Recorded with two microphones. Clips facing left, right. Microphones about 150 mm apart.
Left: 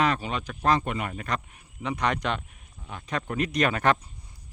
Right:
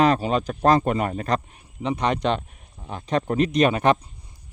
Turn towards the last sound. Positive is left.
turn(degrees=-20)  # may be behind; listen again after turning